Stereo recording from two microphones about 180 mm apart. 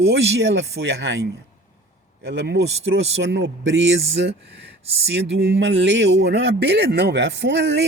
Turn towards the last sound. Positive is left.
turn(degrees=-85)